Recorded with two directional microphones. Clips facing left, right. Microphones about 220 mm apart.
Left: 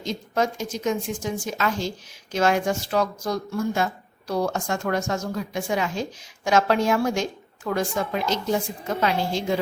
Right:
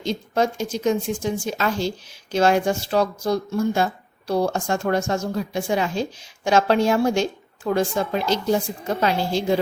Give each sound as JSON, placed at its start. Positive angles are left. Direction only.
{"t": 0.0, "sound": "a woman's voice", "side_deg": -30}